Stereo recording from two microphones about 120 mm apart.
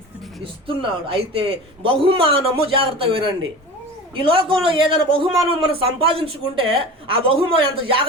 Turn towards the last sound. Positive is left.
turn(degrees=-45)  # may be behind; listen again after turning